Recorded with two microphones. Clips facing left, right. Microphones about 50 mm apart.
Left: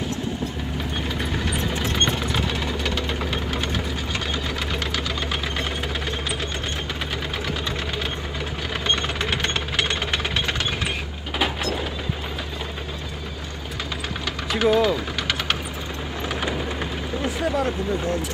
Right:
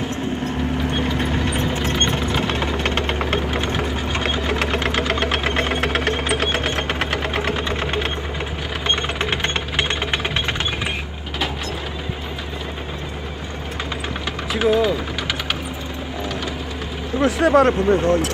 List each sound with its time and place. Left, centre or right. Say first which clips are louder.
0.9 s vehicle: right 5 dB; right
2.5 s engine knocking: right 4 dB; right
3.5 s sewing machine: right 4 dB; right
3.8 s sewing machine: right 5 dB; right
4.3 s sewing machine: right 6 dB; right
5.2 s engine knocking: right 6 dB; right
7.5 s sewing machine: right 5 dB; right
8.8 s a sound: right 3 dB; right
9.3 s engine: right 2 dB; right
14.6 s mains hum: right 1 dB; centre
17.2 s speech: right 10 dB; right